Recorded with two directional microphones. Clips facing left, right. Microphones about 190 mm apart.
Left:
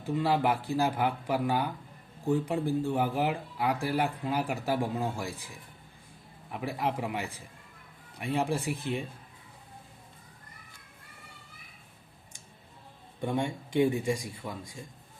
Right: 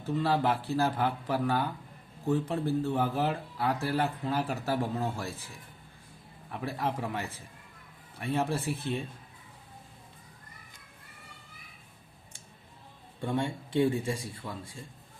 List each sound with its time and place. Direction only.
0.0 s speech: 15° left (ahead or behind)
13.2 s speech: 15° left (ahead or behind)